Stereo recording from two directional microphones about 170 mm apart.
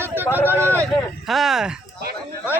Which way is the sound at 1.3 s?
Centre (ahead or behind).